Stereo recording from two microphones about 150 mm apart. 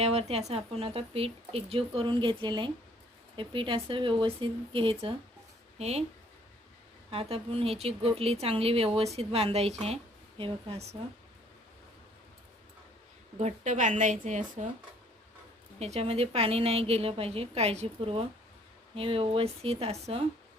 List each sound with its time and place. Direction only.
0.0 s speech: 45° right (ahead or behind)
7.1 s a woman's voice: 40° right (ahead or behind)
13.4 s a woman's voice: 55° right (ahead or behind)
15.8 s speech: 45° right (ahead or behind)